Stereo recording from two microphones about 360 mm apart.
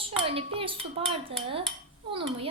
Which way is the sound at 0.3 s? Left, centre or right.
Centre.